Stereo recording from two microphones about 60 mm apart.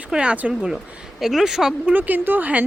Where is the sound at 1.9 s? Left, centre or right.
Right.